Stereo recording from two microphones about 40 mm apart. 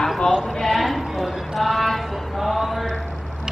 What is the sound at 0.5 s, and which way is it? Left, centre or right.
Clip-clop, centre.